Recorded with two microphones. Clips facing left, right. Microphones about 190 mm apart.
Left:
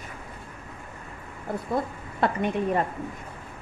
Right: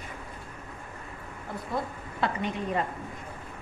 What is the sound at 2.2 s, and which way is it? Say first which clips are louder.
Speech: left 5 dB; 55° left (ahead or behind).